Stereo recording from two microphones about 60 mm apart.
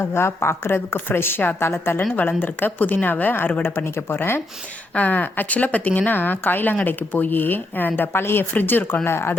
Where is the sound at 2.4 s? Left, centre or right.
Left.